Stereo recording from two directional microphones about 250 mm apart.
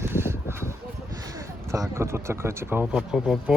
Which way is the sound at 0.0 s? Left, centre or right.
Centre.